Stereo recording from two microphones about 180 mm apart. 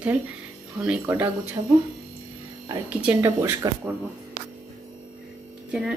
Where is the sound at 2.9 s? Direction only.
10° right (ahead or behind).